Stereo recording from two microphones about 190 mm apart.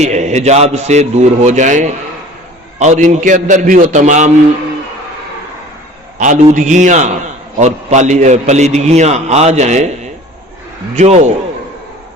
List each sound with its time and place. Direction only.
0.0 s a man's voice: 35° right (ahead or behind)
6.1 s a man's voice: 40° right (ahead or behind)
10.9 s a man's voice: 35° right (ahead or behind)